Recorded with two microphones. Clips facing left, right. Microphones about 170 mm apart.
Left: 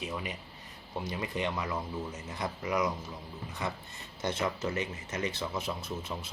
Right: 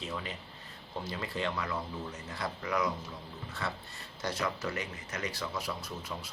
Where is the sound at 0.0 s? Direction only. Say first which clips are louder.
Left 2 dB; 15° left (ahead or behind).